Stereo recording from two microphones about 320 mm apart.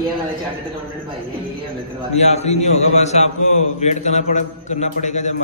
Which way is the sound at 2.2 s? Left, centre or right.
Centre.